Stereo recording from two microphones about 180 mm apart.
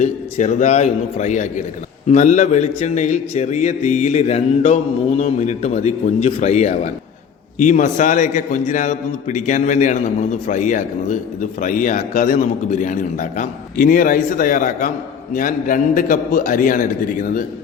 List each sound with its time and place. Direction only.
0.0 s a man's voice: 40° left (ahead or behind)